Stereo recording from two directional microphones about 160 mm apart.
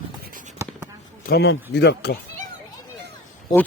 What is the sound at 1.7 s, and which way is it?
Speech, 90° left.